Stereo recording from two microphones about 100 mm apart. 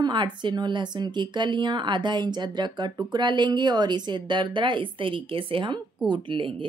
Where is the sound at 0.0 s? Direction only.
50° right (ahead or behind).